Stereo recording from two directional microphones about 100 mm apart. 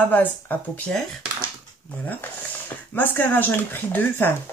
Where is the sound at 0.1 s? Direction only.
15° left (ahead or behind).